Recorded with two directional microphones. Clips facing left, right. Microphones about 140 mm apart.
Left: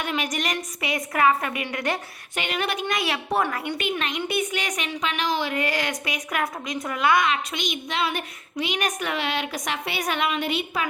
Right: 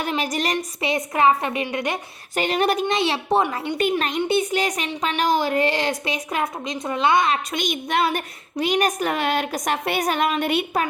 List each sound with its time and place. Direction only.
0.0 s a woman's voice: 30° right (ahead or behind)
2.3 s a woman's voice: 40° right (ahead or behind)
3.8 s speech: 40° right (ahead or behind)
5.6 s a woman's voice: 30° right (ahead or behind)
7.5 s a woman's voice: 50° right (ahead or behind)